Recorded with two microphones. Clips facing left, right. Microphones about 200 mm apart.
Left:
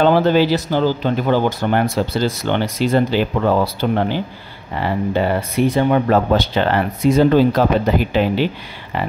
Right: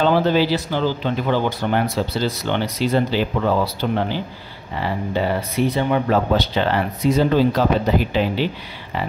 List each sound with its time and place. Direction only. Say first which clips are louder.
0.0 s speech: left 3 dB; 55° left (ahead or behind)